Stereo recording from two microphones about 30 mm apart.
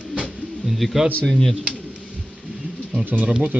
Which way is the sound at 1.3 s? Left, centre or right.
Centre.